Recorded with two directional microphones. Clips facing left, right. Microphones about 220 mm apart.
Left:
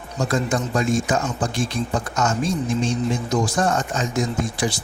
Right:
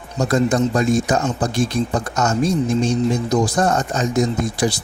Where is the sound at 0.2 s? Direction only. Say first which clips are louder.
Right 6 dB; 40° right (ahead or behind).